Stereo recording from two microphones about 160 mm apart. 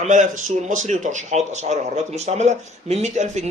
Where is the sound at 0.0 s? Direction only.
50° right (ahead or behind).